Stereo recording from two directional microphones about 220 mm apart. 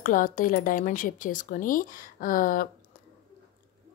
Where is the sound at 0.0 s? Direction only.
40° left (ahead or behind).